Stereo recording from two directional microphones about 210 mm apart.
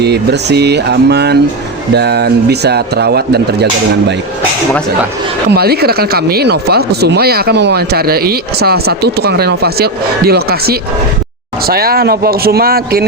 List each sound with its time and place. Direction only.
0.0 s speech: 50° right (ahead or behind)
5.5 s speech: 50° right (ahead or behind)